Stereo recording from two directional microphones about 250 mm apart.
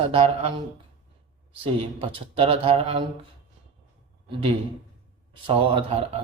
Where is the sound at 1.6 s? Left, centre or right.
Right.